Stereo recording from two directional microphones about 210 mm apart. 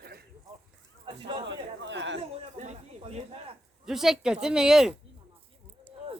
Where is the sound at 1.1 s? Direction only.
20° right (ahead or behind).